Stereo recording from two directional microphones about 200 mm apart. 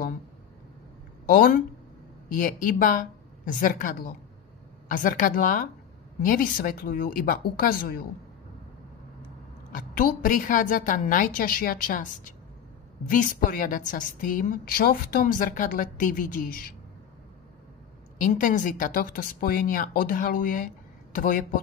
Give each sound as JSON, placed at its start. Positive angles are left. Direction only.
{"t": 1.2, "sound": "a woman's voice", "side_deg": 45}
{"t": 9.7, "sound": "a woman's voice", "side_deg": 45}
{"t": 13.1, "sound": "a woman's voice", "side_deg": 45}
{"t": 18.1, "sound": "a woman's voice", "side_deg": 40}